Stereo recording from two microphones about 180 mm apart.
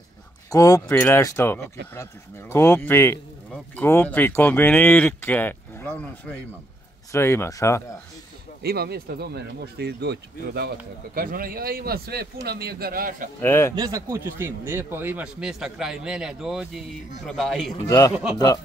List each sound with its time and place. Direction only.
0.5 s speech: 20° left (ahead or behind)
8.6 s a man's voice: 60° right (ahead or behind)
11.1 s a man's voice: 55° right (ahead or behind)
13.4 s speech: 15° left (ahead or behind)
13.7 s a man's voice: 20° right (ahead or behind); by 17.7 s centre (ahead or behind)
17.8 s a man's voice: 20° left (ahead or behind)